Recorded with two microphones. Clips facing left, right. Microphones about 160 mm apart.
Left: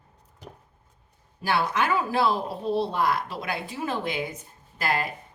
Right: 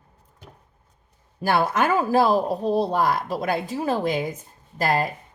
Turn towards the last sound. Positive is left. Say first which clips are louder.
# right 5 dB
turn(degrees=-40)  # may be behind; listen again after turning